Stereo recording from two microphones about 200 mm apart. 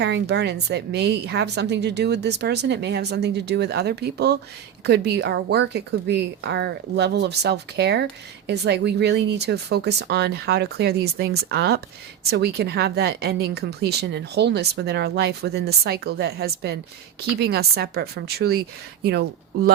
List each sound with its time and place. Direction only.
0.0 s a woman's voice: 55° right (ahead or behind)